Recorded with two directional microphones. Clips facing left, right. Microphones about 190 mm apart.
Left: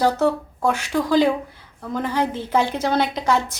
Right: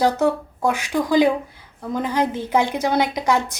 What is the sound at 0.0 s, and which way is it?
A woman's voice, 15° right (ahead or behind).